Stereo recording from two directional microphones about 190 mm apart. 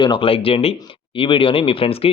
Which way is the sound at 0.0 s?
25° left (ahead or behind).